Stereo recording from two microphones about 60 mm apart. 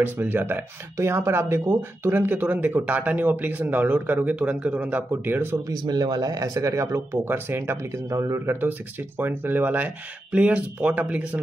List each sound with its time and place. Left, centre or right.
0.0 s speech: right
0.9 s speech: right
5.7 s speech: right
7.2 s speech: right
7.9 s speech: right
8.5 s speech: right